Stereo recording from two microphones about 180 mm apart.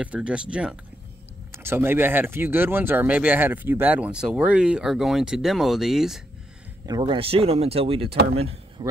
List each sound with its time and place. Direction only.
0.0 s speech: 5° right (ahead or behind)
6.9 s speech: 25° right (ahead or behind)
8.4 s a sound: 35° right (ahead or behind)